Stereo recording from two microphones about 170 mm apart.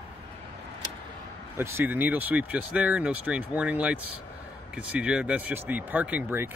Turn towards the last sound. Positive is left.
turn(degrees=-10)  # may be behind; listen again after turning